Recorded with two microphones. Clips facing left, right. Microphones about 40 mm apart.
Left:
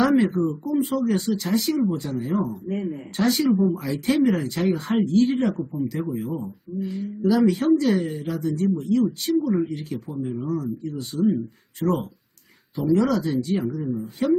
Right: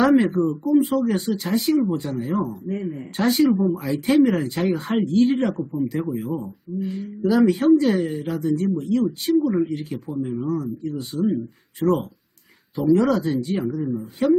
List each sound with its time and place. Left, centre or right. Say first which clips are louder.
0.0 s speech: right 2 dB; centre
2.5 s speech: even; centre
3.2 s speech: right 2 dB; centre
11.8 s speech: right 3 dB; centre
12.7 s speech: right 2 dB; centre